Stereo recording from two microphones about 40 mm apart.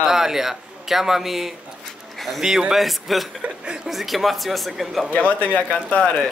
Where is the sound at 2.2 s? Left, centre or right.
Centre.